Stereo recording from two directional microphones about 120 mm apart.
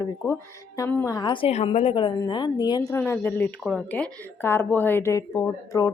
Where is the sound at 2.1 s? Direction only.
35° left (ahead or behind).